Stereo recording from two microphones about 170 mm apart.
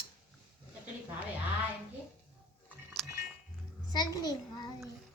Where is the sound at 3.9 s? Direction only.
25° left (ahead or behind).